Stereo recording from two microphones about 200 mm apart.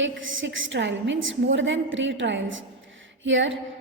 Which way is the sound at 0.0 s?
70° right (ahead or behind).